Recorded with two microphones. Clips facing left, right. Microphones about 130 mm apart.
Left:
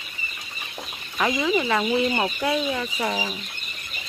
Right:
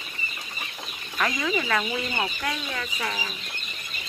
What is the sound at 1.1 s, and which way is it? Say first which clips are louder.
Speech: left 4 dB; 15° left (ahead or behind).